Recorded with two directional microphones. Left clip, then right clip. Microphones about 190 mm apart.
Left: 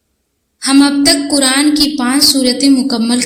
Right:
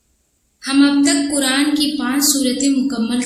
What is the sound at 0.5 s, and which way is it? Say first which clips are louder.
A woman's voice: left 4 dB; 40° left (ahead or behind).